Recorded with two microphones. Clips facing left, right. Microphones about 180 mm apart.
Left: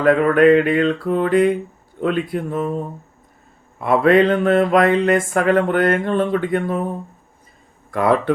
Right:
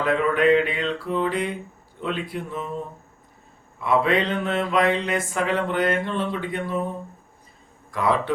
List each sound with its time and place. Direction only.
0.0 s mantra: 50° left (ahead or behind)
3.8 s mantra: 50° left (ahead or behind)
7.9 s speech: 55° left (ahead or behind)